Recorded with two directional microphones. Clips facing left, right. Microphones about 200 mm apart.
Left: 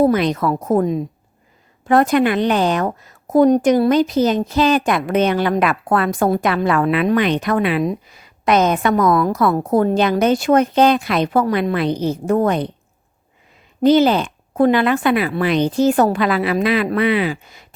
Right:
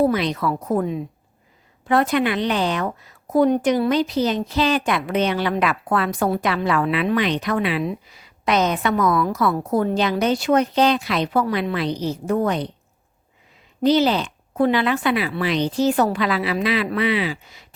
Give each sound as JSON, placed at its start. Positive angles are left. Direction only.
{"t": 0.0, "sound": "a woman's voice", "side_deg": 45}
{"t": 13.8, "sound": "a woman's voice", "side_deg": 50}